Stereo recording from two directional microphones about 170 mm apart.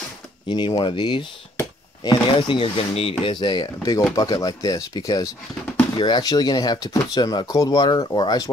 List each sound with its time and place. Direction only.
0.5 s speech: 30° left (ahead or behind)